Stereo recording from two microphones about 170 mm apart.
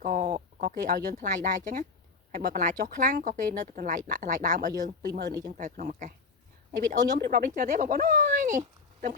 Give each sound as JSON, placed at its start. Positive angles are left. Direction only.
{"t": 0.0, "sound": "speech", "side_deg": -55}